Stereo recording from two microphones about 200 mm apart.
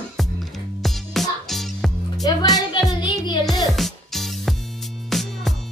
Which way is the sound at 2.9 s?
20° left (ahead or behind).